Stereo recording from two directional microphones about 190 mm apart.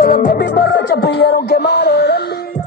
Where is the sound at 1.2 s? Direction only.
60° left (ahead or behind).